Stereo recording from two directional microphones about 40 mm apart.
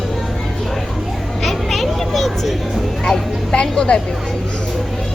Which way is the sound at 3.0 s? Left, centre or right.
Left.